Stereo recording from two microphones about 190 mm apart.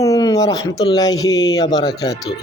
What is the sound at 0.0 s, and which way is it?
Speech, 15° left (ahead or behind).